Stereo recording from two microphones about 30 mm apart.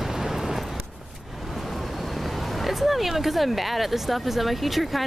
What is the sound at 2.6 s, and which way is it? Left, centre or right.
Speech, centre.